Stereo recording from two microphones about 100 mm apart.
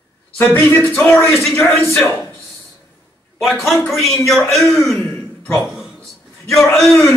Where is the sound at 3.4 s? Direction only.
Centre (ahead or behind).